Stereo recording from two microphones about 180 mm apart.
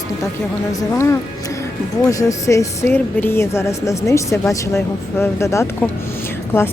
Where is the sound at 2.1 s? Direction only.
20° left (ahead or behind).